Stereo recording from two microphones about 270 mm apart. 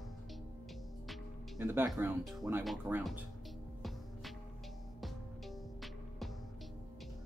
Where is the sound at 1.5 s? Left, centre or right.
Centre.